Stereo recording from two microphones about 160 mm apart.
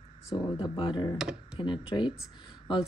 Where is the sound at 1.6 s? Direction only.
30° left (ahead or behind).